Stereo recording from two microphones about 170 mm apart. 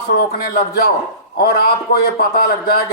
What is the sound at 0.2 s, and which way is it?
A man's voice, 60° left (ahead or behind).